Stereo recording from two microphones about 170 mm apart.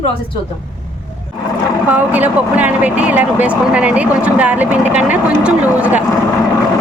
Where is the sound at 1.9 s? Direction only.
10° right (ahead or behind).